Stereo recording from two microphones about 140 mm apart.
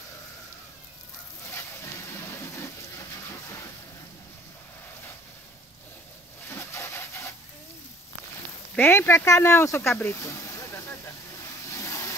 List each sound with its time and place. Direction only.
6.5 s wood: 15° left (ahead or behind)
8.7 s speech: 15° left (ahead or behind)
11.8 s vehicle: 20° left (ahead or behind)